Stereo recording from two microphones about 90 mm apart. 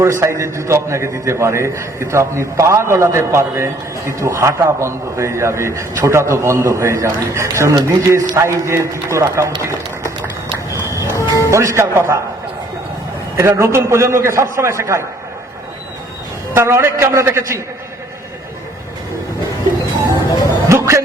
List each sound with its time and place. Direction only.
0.0 s a man's voice: 35° right (ahead or behind)
10.8 s music: 30° right (ahead or behind)
11.1 s music: 35° left (ahead or behind)
11.5 s a man's voice: 30° right (ahead or behind)
13.3 s a man's voice: 30° right (ahead or behind)
16.6 s a man's voice: 30° right (ahead or behind)
20.7 s music: 30° right (ahead or behind)